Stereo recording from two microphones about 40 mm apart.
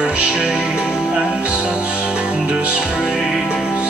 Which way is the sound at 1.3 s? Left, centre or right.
Right.